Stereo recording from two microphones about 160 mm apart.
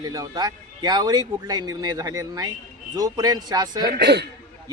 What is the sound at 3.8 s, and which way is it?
Speech, 90° right.